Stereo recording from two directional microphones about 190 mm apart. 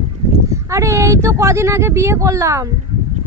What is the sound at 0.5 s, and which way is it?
Speech, 15° right (ahead or behind).